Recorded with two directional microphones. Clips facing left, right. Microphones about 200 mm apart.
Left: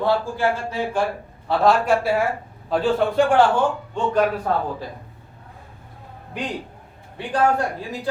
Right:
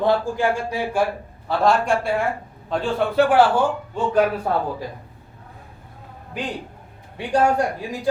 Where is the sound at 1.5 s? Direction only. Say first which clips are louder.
Left 1 dB; 5° left (ahead or behind).